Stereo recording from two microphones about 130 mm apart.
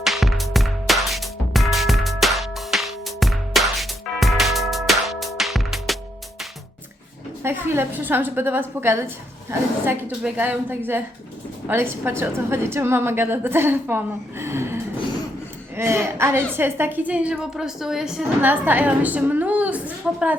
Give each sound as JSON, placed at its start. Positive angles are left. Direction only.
{"t": 0.0, "sound": "music", "side_deg": 0}
{"t": 7.4, "sound": "a woman's voice", "side_deg": -20}